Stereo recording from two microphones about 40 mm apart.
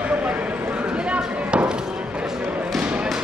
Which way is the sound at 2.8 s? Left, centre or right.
Right.